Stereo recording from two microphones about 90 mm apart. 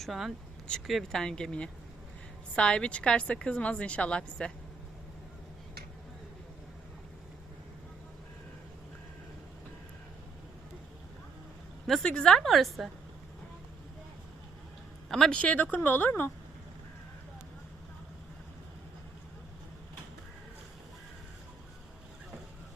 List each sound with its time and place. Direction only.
0.0 s a woman's voice: centre (ahead or behind)
11.9 s a woman's voice: 5° left (ahead or behind)
15.1 s speech: 10° left (ahead or behind)